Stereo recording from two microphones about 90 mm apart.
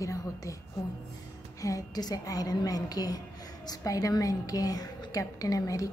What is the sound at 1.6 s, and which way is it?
A woman's voice, 40° left (ahead or behind).